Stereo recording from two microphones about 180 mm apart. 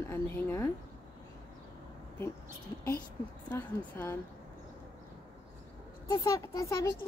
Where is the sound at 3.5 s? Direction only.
10° left (ahead or behind).